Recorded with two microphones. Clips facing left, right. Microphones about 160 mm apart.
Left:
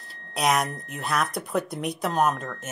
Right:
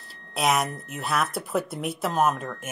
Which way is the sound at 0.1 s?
Centre (ahead or behind).